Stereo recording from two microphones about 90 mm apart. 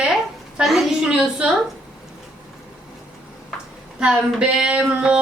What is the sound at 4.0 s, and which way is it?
A woman's voice, 10° right (ahead or behind).